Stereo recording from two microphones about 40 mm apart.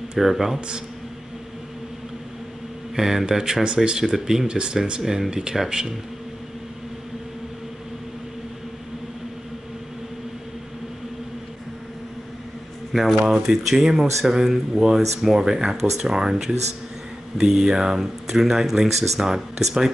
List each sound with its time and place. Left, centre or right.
0.2 s speech: centre
3.0 s speech: centre
4.5 s speech: right
12.9 s speech: centre